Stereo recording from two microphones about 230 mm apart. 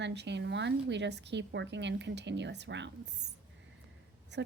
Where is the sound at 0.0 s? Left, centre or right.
Right.